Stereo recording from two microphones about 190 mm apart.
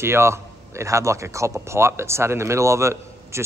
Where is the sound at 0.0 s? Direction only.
15° right (ahead or behind).